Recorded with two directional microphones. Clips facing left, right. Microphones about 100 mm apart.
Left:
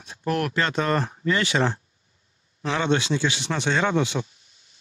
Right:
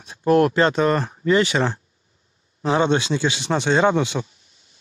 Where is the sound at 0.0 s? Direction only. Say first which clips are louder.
Right 9 dB; 25° right (ahead or behind).